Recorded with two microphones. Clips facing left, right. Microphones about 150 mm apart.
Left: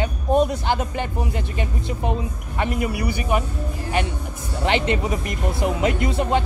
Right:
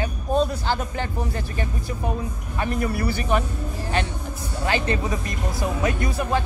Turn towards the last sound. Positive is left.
turn(degrees=25)  # may be behind; listen again after turning